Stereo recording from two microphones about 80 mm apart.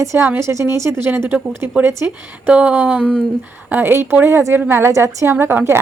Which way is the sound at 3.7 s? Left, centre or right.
Right.